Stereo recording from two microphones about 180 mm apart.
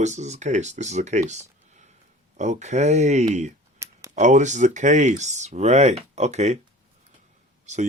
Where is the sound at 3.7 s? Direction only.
15° right (ahead or behind).